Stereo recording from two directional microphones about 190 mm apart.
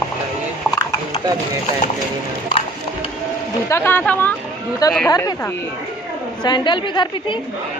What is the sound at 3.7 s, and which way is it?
A woman's voice, 10° left (ahead or behind).